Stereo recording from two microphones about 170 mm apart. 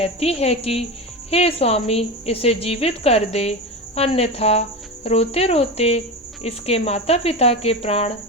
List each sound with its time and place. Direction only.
0.0 s a woman's voice: 35° left (ahead or behind)